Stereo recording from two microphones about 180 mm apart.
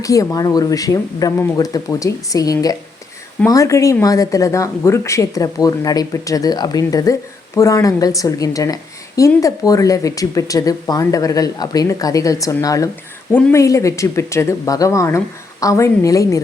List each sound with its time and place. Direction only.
0.0 s speech: 20° left (ahead or behind)